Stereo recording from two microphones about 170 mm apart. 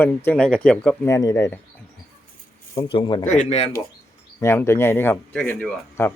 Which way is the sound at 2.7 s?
30° left (ahead or behind).